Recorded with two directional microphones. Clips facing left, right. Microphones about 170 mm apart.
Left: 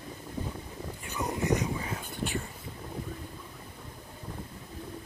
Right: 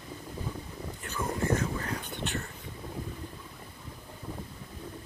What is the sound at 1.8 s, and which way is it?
Whispering, 5° left (ahead or behind).